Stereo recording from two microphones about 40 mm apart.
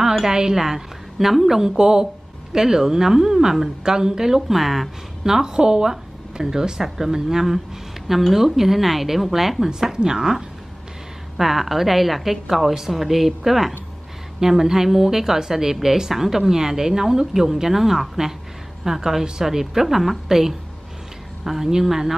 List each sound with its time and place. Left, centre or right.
0.0 s a woman's voice: centre
1.8 s a woman's voice: centre